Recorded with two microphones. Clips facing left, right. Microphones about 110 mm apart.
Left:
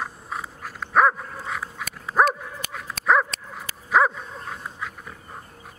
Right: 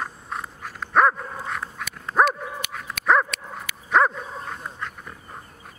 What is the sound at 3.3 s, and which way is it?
Dog, 35° left (ahead or behind).